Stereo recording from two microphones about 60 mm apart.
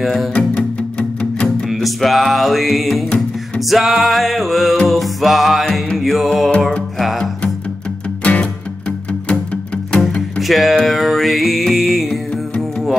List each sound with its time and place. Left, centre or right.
0.0 s music: centre
0.3 s music: centre
1.7 s music: centre
8.2 s music: left
10.4 s music: centre